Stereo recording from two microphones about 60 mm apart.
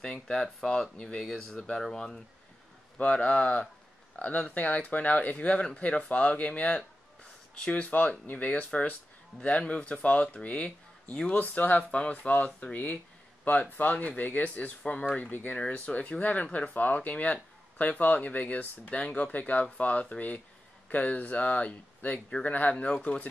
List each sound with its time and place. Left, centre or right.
0.0 s speech: centre
3.0 s speech: left